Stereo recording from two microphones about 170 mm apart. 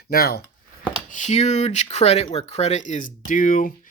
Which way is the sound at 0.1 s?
65° left (ahead or behind).